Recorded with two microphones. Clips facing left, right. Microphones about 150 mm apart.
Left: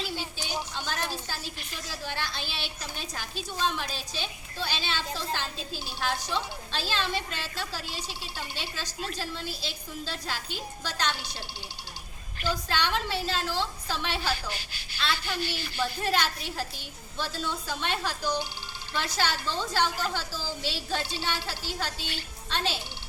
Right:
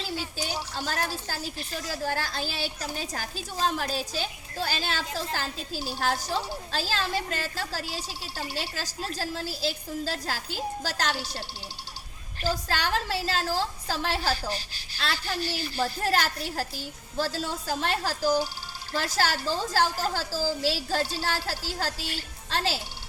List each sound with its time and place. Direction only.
1.5 s a woman's voice: 40° right (ahead or behind)